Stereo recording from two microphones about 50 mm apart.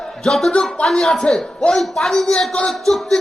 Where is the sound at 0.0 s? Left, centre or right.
Centre.